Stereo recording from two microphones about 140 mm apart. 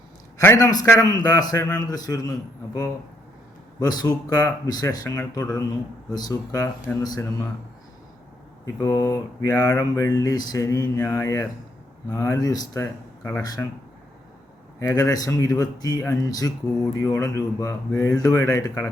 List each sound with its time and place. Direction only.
0.3 s speech: 25° left (ahead or behind)
3.8 s speech: 30° left (ahead or behind)
8.6 s speech: 30° left (ahead or behind)
14.8 s speech: 25° left (ahead or behind)